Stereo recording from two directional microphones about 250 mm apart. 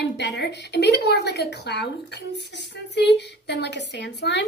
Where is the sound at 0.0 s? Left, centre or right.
Left.